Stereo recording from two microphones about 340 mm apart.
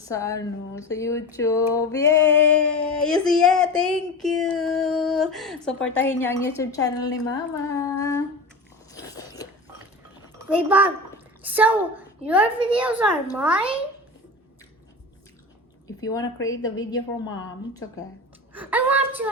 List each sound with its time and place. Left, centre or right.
0.1 s speech: centre
1.7 s female singing: centre
6.6 s speech: centre
8.9 s biting: centre
10.7 s female singing: centre
11.4 s a woman's voice: centre
12.8 s female singing: centre
15.9 s speech: centre
16.2 s a woman's voice: left
16.6 s speech: centre
18.5 s female singing: centre